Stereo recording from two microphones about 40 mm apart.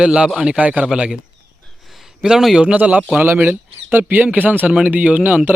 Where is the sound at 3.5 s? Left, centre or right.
Right.